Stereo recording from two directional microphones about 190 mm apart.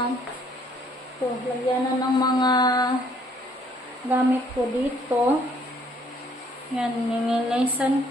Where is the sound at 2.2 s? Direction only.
20° left (ahead or behind).